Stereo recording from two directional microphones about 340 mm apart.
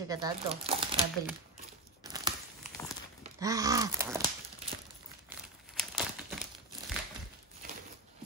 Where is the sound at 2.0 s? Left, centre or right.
Centre.